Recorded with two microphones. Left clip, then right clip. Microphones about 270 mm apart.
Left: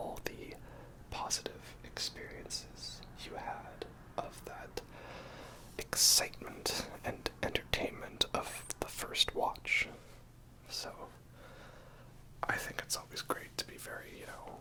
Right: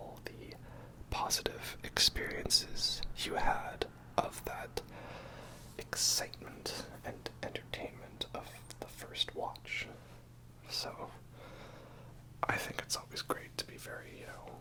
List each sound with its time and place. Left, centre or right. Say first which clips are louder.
0.1 s whispering: left 5 dB; left
1.1 s whispering: right 4 dB; centre
1.8 s whispering: right 10 dB; right; by 9.5 s left
9.5 s speech: left 7 dB; centre
10.7 s speech: right 3 dB; centre
12.4 s whispering: right 1 dB; centre